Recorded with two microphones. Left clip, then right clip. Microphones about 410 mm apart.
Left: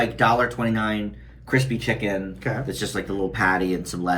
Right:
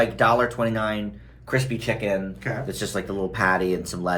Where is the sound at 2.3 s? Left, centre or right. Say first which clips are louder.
Left 2 dB; centre.